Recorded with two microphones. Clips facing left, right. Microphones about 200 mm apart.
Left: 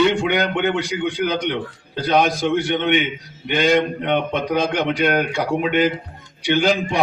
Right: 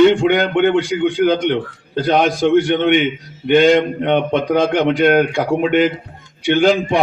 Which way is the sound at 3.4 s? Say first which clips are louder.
Right 6 dB; 55° right (ahead or behind).